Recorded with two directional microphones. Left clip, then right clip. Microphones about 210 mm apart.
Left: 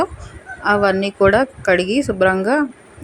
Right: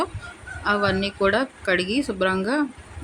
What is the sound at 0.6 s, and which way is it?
A woman's voice, 15° left (ahead or behind).